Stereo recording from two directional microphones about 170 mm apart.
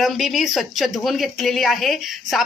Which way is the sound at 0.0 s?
Centre (ahead or behind).